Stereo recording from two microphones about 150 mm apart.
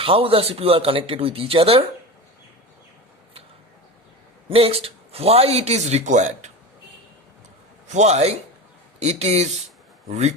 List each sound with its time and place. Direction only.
0.0 s speech: 40° right (ahead or behind)
4.4 s speech: 40° right (ahead or behind)
7.9 s speech: 50° right (ahead or behind)